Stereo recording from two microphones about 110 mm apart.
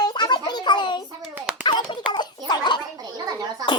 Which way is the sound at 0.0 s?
40° left (ahead or behind).